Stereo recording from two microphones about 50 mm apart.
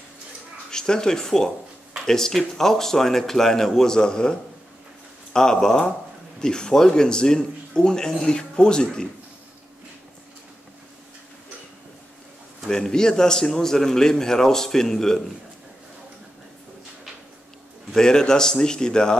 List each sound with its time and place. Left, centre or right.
0.7 s a man's voice: centre
12.6 s a man's voice: centre
17.9 s a man's voice: centre